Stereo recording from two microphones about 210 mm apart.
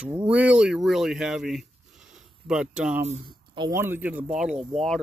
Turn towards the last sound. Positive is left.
turn(degrees=-5)  # may be behind; listen again after turning